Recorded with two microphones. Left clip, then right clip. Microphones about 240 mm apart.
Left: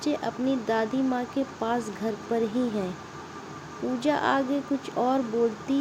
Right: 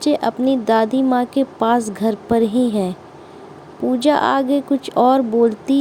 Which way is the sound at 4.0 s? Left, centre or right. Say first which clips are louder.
Right 9 dB; right.